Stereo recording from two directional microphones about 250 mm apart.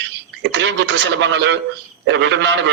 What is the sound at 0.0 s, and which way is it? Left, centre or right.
A man's voice, right.